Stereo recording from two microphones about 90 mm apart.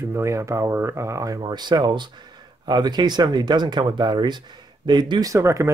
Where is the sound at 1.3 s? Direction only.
55° right (ahead or behind).